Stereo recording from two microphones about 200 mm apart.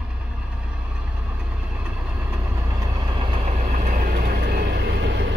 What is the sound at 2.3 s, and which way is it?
Vehicle, 15° right (ahead or behind).